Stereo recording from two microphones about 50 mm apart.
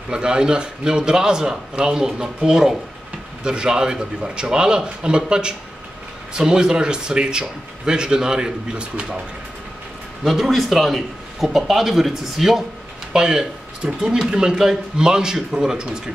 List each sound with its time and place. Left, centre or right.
0.1 s speech: centre
10.2 s a man's voice: centre